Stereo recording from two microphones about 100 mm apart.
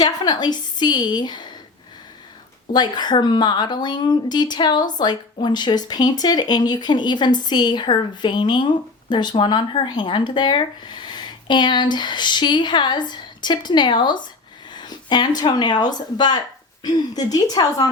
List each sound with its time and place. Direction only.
0.0 s a woman's voice: 45° left (ahead or behind)
2.7 s a woman's voice: 45° left (ahead or behind)